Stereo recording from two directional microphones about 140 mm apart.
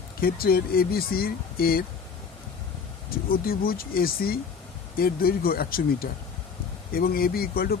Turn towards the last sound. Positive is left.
turn(degrees=90)